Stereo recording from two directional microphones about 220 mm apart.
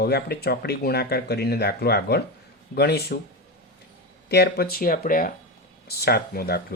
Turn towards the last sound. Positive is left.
turn(degrees=45)  # may be behind; listen again after turning